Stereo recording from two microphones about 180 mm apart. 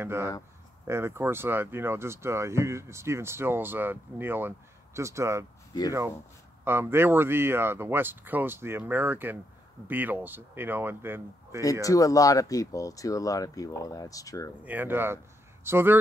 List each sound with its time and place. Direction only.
0.0 s speech: 15° right (ahead or behind)
11.8 s speech: 20° left (ahead or behind)
14.6 s speech: 10° right (ahead or behind)